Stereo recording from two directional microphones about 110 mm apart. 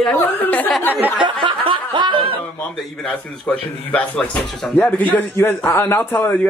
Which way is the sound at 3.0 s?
10° left (ahead or behind).